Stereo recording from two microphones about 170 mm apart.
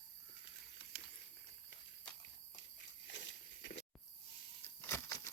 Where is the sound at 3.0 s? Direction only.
90° left.